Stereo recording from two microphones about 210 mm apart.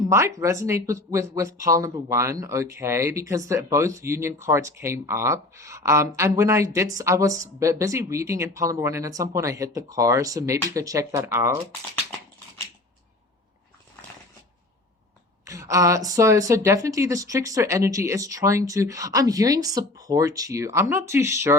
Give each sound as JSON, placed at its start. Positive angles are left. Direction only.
{"t": 0.0, "sound": "speech", "side_deg": -15}
{"t": 15.4, "sound": "speech", "side_deg": -15}